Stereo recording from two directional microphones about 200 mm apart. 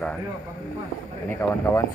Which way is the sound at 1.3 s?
10° left (ahead or behind).